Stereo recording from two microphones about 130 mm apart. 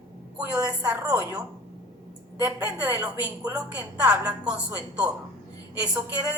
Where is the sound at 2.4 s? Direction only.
10° right (ahead or behind).